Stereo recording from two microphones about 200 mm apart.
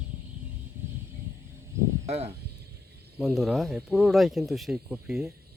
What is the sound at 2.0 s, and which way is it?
Speech, 30° right (ahead or behind).